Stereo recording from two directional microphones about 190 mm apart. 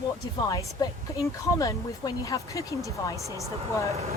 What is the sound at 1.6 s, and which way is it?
Speech, 20° left (ahead or behind).